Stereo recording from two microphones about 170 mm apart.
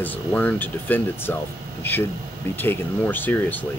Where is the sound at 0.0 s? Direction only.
10° left (ahead or behind).